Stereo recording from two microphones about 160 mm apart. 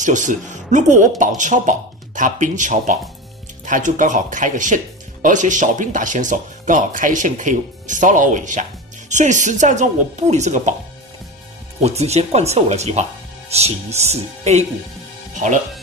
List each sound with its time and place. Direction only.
0.0 s speech: 50° right (ahead or behind)
11.8 s speech: 40° right (ahead or behind)